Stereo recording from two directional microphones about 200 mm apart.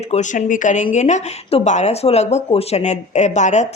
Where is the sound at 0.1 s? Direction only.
40° left (ahead or behind).